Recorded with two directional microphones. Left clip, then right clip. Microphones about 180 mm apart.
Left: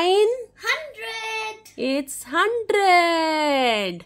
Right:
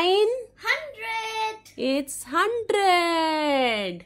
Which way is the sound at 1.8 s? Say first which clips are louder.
Left 1 dB; 10° left (ahead or behind).